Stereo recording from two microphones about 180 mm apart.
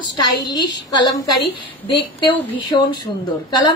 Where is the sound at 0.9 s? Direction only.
25° left (ahead or behind).